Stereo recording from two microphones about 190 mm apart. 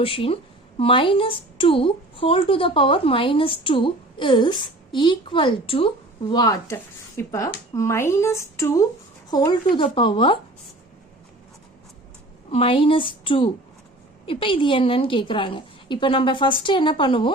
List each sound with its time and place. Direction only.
0.0 s a woman's voice: 30° left (ahead or behind)
12.5 s a woman's voice: 30° left (ahead or behind)